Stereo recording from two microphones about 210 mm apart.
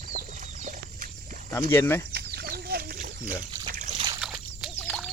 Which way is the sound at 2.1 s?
50° right (ahead or behind).